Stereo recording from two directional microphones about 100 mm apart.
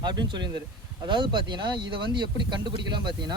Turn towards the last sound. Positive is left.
turn(degrees=-45)  # may be behind; listen again after turning